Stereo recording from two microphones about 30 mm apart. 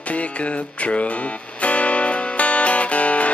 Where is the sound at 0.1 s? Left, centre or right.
Left.